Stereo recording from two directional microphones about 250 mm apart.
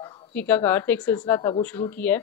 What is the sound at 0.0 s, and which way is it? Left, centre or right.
A woman's voice, centre.